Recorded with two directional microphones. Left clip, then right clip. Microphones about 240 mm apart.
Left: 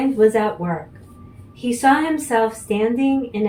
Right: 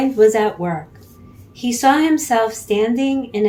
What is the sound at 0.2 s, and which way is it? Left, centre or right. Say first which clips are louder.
Speech: right 3 dB; right.